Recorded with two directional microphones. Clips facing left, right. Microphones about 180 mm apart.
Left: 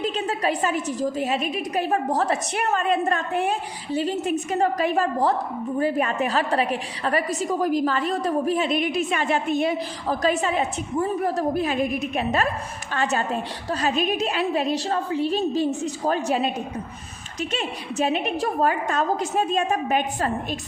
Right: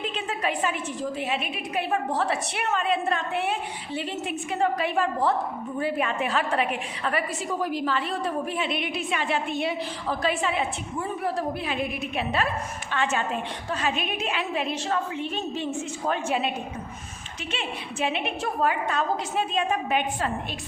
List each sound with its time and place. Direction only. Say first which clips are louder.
0.0 s a woman's voice: left 5 dB; 40° left (ahead or behind)
17.5 s a woman's voice: left 1 dB; 40° left (ahead or behind)